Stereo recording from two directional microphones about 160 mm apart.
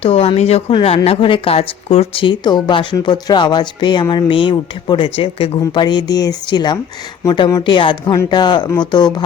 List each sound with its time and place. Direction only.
0.0 s a woman's voice: 35° left (ahead or behind)